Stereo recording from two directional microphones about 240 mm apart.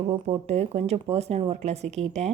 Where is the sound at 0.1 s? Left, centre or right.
Right.